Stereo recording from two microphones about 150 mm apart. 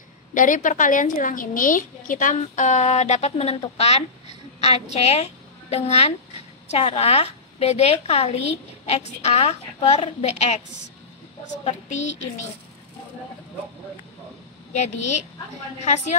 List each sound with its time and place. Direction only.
0.3 s a woman's voice: 60° left (ahead or behind)
14.7 s a woman's voice: 50° left (ahead or behind)